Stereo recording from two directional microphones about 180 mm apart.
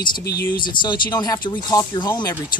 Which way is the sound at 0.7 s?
25° left (ahead or behind).